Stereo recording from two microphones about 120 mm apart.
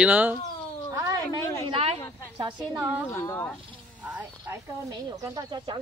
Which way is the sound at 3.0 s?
20° left (ahead or behind).